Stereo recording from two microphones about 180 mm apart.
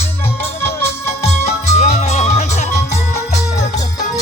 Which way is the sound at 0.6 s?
15° left (ahead or behind).